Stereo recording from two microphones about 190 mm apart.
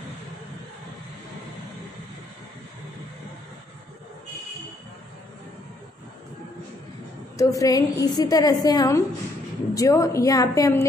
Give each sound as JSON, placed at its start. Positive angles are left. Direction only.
{"t": 7.3, "sound": "a woman's voice", "side_deg": 20}